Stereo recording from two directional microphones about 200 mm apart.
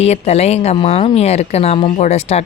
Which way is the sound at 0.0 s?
30° left (ahead or behind).